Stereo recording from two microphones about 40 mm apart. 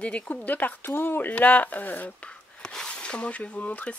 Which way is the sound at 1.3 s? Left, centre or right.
Left.